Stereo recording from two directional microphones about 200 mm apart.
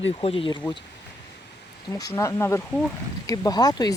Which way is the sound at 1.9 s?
15° left (ahead or behind).